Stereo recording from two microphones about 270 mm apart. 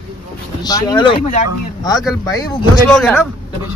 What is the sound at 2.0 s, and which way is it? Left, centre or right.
Speech, centre.